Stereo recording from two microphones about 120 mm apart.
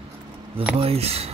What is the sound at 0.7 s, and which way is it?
Speech, 55° right (ahead or behind).